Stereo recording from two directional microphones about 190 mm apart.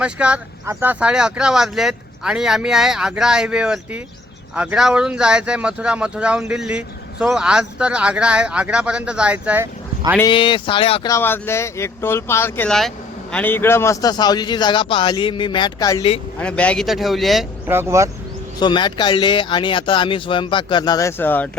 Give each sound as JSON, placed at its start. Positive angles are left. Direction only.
{"t": 0.0, "sound": "speech", "side_deg": -5}
{"t": 10.2, "sound": "speech", "side_deg": 25}
{"t": 11.1, "sound": "speech", "side_deg": 10}
{"t": 16.4, "sound": "speech", "side_deg": 5}
{"t": 17.7, "sound": "speech", "side_deg": -15}
{"t": 18.6, "sound": "speech", "side_deg": 25}